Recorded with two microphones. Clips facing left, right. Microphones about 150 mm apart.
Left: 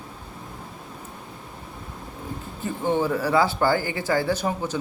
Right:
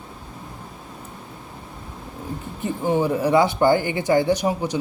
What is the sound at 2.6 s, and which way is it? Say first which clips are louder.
Speech: right 2 dB; 15° right (ahead or behind).